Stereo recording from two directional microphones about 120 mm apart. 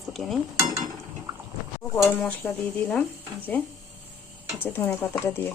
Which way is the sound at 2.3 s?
10° left (ahead or behind).